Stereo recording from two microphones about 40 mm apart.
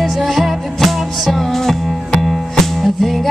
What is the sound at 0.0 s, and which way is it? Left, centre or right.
Music, centre.